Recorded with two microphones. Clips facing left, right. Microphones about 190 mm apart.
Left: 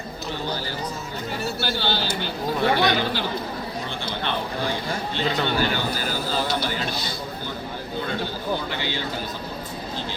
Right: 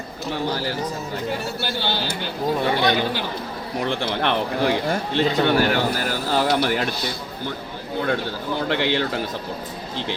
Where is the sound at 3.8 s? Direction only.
85° right; by 7.5 s 70° right (ahead or behind).